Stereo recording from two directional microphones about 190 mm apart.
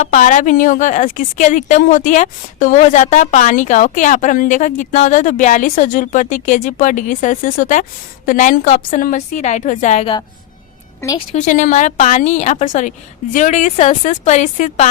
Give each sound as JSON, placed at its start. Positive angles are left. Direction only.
{"t": 0.0, "sound": "a woman's voice", "side_deg": 40}
{"t": 11.3, "sound": "a woman's voice", "side_deg": 40}